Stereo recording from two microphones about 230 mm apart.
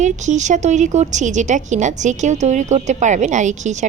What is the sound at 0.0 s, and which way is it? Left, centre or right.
A woman's voice, right.